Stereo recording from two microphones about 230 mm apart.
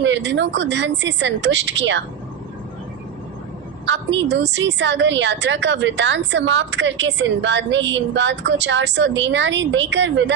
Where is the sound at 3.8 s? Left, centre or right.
Right.